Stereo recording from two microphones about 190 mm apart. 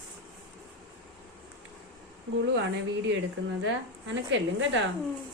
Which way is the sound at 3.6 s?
75° right (ahead or behind).